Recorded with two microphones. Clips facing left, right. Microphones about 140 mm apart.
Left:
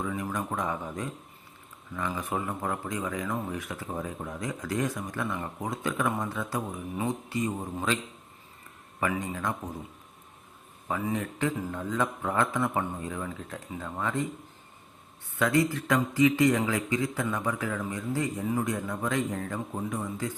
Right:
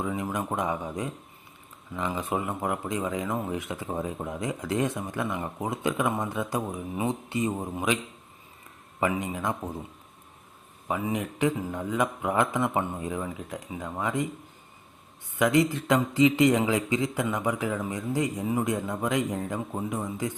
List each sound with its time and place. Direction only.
0.0 s a man's voice: 20° right (ahead or behind)
9.0 s speech: 20° right (ahead or behind)
10.8 s a man's voice: 15° right (ahead or behind)
15.4 s speech: 20° right (ahead or behind)